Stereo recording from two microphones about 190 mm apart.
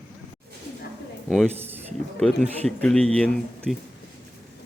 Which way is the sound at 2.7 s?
5° left (ahead or behind).